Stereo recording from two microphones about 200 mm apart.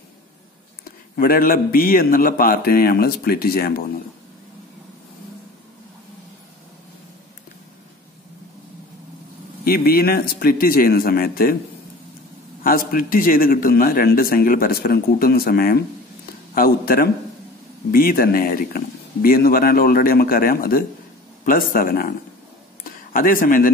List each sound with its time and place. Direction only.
0.8 s a man's voice: 45° left (ahead or behind)
9.7 s a man's voice: 50° left (ahead or behind)
12.6 s a man's voice: 45° left (ahead or behind)
23.1 s a man's voice: 45° left (ahead or behind)